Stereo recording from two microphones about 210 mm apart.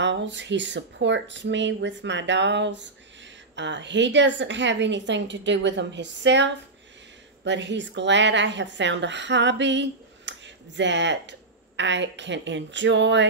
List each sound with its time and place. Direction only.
0.0 s a woman's voice: 60° right (ahead or behind)